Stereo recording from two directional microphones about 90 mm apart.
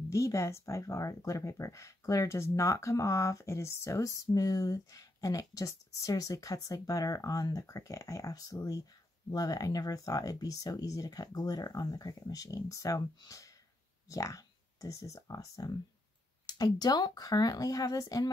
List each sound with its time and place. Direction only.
0.1 s speech: 35° left (ahead or behind)